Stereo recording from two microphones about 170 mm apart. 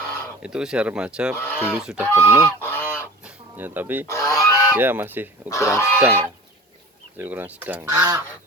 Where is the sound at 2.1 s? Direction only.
15° left (ahead or behind).